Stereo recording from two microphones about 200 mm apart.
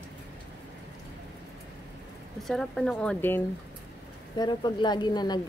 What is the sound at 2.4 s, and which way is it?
Speech, centre (ahead or behind).